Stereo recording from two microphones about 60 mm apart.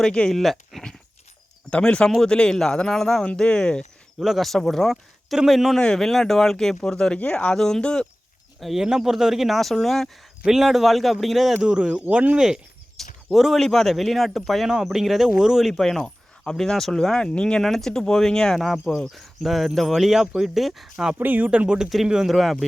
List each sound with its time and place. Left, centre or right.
0.0 s speech: centre
1.8 s speech: centre
4.2 s speech: centre
5.7 s speech: centre
8.6 s speech: centre
10.4 s speech: centre
11.6 s speech: centre
12.4 s speech: centre
13.0 s speech: centre
14.7 s speech: centre
21.2 s speech: right
21.8 s speech: centre